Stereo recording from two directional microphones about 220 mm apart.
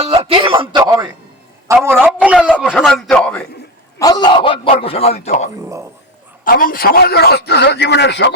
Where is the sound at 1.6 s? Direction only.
10° right (ahead or behind); by 3.4 s 5° left (ahead or behind).